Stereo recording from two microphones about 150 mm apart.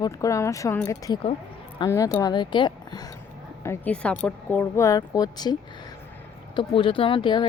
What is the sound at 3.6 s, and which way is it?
Speech, 15° left (ahead or behind).